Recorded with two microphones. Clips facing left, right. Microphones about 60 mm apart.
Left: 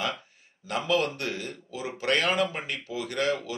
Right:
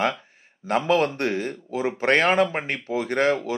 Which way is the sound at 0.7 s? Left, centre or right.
Right.